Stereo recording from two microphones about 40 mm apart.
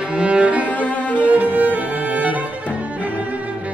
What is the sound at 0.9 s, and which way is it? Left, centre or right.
Music, left.